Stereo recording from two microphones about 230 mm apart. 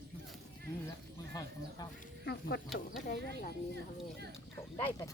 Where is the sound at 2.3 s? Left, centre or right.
Left.